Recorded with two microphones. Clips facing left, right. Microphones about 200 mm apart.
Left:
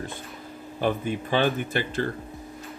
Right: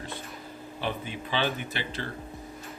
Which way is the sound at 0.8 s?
50° left (ahead or behind).